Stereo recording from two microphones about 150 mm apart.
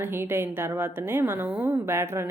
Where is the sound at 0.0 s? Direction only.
15° right (ahead or behind).